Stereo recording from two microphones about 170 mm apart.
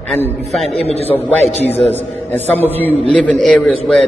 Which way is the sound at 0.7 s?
35° left (ahead or behind).